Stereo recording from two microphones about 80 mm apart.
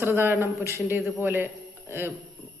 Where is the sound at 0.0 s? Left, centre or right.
Right.